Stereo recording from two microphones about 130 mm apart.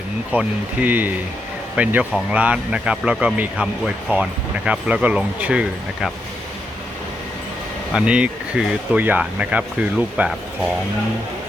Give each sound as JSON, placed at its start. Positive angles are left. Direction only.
{"t": 0.3, "sound": "speech", "side_deg": -10}
{"t": 7.9, "sound": "speech", "side_deg": -5}